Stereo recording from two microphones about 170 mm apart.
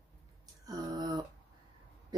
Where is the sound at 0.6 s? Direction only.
20° right (ahead or behind).